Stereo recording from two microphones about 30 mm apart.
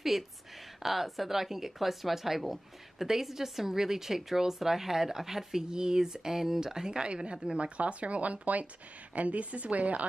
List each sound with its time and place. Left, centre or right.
0.1 s a woman's voice: centre
7.0 s speech: right